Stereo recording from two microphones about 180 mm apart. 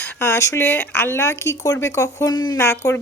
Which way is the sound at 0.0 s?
15° left (ahead or behind).